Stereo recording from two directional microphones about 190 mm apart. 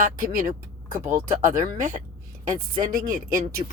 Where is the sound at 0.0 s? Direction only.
50° right (ahead or behind).